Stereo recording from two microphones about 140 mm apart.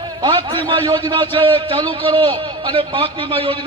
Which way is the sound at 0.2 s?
30° right (ahead or behind).